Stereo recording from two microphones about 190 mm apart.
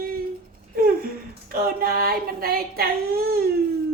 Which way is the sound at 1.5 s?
50° right (ahead or behind).